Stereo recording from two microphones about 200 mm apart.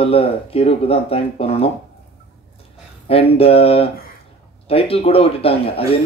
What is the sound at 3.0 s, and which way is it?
Speech, 30° left (ahead or behind).